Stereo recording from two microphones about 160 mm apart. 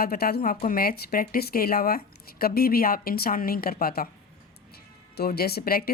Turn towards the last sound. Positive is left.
turn(degrees=75)  # may be behind; listen again after turning